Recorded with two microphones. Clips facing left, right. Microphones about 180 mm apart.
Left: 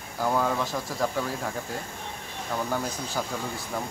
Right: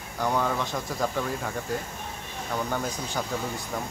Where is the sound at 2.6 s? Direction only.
5° left (ahead or behind).